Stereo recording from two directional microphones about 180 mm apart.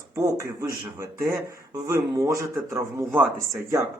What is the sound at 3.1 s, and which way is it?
Speech, centre (ahead or behind).